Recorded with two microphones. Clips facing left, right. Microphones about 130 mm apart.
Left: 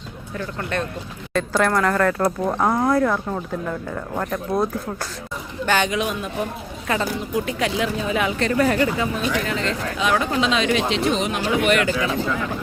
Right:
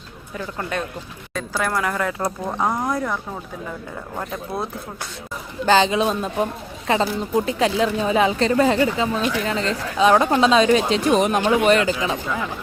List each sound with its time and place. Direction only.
0.3 s speech: 10° right (ahead or behind)
5.6 s speech: 25° right (ahead or behind)
11.9 s speech: 20° right (ahead or behind)